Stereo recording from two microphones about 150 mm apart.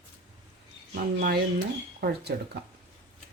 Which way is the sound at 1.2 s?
90° right.